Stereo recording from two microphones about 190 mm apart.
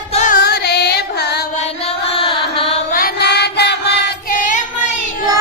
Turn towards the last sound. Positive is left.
turn(degrees=40)  # may be behind; listen again after turning